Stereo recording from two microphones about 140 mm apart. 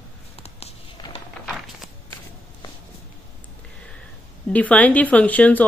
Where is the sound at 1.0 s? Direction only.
30° left (ahead or behind).